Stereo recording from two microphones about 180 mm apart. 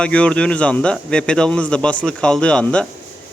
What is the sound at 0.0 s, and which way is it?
A man's voice, 5° left (ahead or behind).